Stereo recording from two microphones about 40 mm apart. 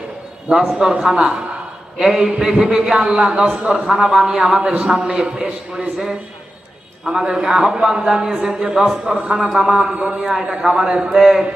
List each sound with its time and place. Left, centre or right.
0.4 s a man's voice: centre
3.8 s a man's voice: centre
7.0 s a man's voice: centre
9.0 s a man's voice: right
11.2 s a man's voice: centre